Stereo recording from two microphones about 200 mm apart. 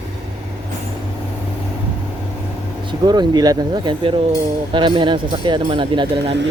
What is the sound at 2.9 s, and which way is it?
Speech, 20° right (ahead or behind).